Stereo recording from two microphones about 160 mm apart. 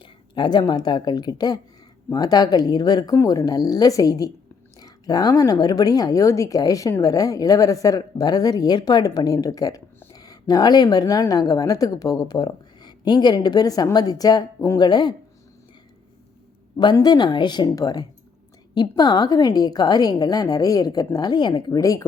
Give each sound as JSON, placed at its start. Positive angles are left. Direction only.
{"t": 0.0, "sound": "a woman's voice", "side_deg": 30}
{"t": 16.7, "sound": "a woman's voice", "side_deg": 25}